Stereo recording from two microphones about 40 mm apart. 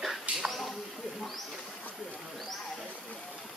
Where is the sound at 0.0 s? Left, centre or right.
Centre.